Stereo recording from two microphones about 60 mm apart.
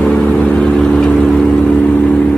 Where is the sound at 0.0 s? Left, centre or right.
Left.